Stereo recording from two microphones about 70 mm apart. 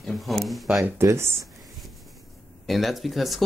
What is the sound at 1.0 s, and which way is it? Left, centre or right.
Speech, right.